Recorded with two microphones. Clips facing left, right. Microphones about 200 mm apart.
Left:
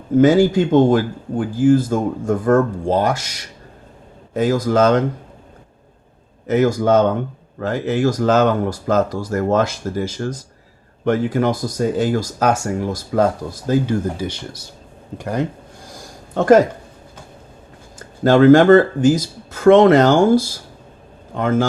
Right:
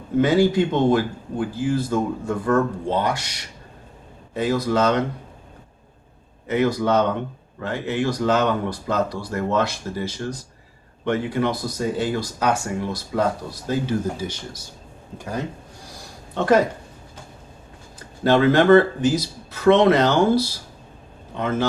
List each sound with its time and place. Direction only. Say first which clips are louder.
0.2 s speech: left 5 dB; 45° left (ahead or behind)
4.4 s speech: left 5 dB; 45° left (ahead or behind)
6.5 s speech: left 5 dB; 45° left (ahead or behind)
15.9 s a sound: left 6 dB; 45° left (ahead or behind)
18.2 s speech: left 7 dB; 45° left (ahead or behind)